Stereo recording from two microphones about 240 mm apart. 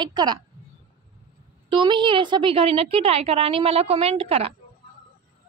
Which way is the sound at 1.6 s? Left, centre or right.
Centre.